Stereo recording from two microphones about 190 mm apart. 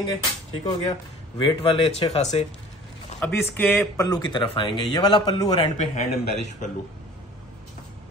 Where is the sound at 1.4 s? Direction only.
30° left (ahead or behind).